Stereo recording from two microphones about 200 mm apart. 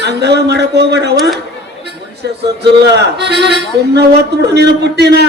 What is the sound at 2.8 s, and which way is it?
Speech, 55° right (ahead or behind).